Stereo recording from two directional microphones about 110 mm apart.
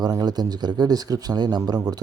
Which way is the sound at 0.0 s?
40° right (ahead or behind).